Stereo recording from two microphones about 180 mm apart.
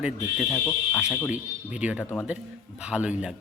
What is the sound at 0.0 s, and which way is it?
Speech, 5° right (ahead or behind).